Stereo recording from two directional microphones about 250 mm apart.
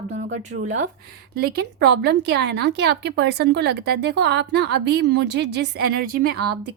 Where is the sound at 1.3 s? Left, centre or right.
Right.